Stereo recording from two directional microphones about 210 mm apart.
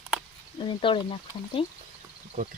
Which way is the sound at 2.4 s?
35° right (ahead or behind).